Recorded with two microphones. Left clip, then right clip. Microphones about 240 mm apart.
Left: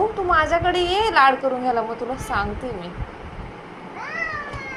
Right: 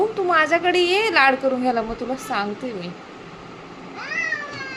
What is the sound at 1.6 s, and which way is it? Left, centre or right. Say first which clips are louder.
Speech: even; right.